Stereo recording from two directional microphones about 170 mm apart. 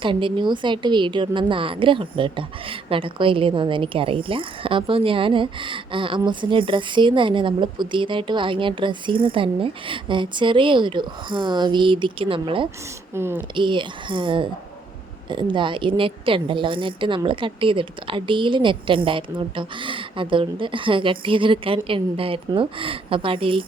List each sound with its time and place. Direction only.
0.0 s a woman's voice: 30° right (ahead or behind)
13.1 s speech: 15° right (ahead or behind)
13.6 s a woman's voice: 30° right (ahead or behind)